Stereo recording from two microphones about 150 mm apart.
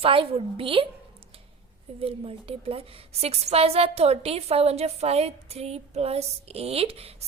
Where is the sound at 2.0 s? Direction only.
40° right (ahead or behind).